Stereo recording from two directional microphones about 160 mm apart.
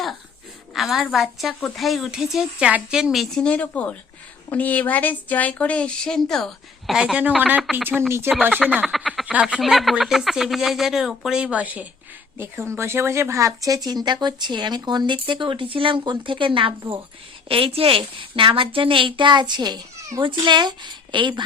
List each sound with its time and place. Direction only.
0.7 s speech: centre (ahead or behind)
8.8 s a woman's voice: centre (ahead or behind); by 21.4 s 30° right (ahead or behind)